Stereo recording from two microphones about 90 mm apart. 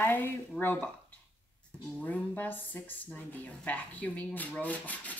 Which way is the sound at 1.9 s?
15° left (ahead or behind).